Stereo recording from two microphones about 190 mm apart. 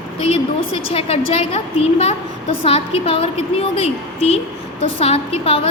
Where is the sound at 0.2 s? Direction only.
30° left (ahead or behind).